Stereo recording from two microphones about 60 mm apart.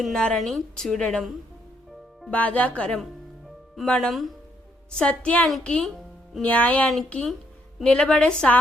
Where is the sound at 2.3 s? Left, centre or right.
Left.